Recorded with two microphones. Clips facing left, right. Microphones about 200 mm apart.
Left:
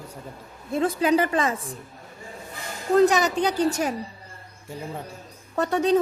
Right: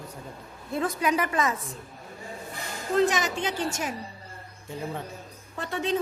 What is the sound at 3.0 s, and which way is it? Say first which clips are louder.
Speech: left 6 dB; 40° left (ahead or behind).